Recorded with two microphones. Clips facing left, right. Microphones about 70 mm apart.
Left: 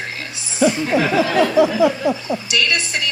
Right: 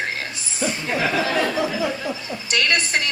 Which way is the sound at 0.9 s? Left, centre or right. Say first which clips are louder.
Left 3 dB; left.